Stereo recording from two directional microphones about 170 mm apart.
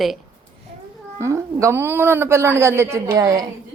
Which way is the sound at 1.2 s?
15° right (ahead or behind).